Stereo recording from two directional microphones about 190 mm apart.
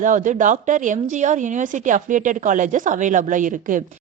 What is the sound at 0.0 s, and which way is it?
A woman's voice, 40° right (ahead or behind).